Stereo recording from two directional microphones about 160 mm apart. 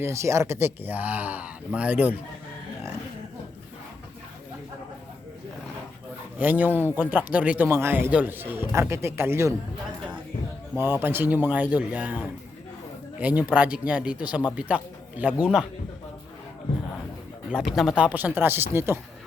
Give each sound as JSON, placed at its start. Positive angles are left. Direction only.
{"t": 0.0, "sound": "a man's voice", "side_deg": -20}
{"t": 6.4, "sound": "a man's voice", "side_deg": -10}
{"t": 10.8, "sound": "a man's voice", "side_deg": -15}
{"t": 13.1, "sound": "a man's voice", "side_deg": -10}
{"t": 17.5, "sound": "a man's voice", "side_deg": -5}